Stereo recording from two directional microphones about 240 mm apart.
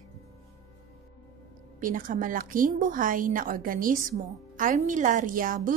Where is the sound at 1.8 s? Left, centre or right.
Right.